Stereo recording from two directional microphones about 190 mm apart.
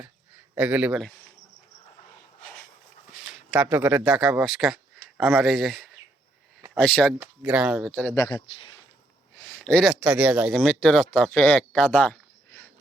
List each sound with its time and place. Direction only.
0.5 s speech: 10° right (ahead or behind)
3.1 s speech: centre (ahead or behind)
7.2 s speech: 5° right (ahead or behind)
8.1 s speech: 20° left (ahead or behind)
9.4 s speech: 10° left (ahead or behind)